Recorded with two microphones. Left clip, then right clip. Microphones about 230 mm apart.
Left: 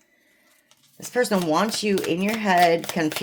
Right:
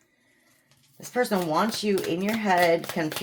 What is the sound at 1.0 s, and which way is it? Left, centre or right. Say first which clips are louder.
Speech: left 3 dB; left.